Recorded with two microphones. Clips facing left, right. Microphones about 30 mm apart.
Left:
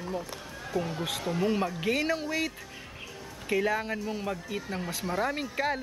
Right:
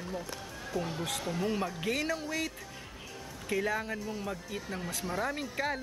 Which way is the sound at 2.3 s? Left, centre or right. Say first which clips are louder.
Left 4 dB; centre.